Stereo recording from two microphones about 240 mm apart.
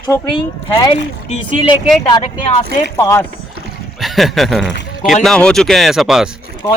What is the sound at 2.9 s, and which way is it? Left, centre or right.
Speech, centre.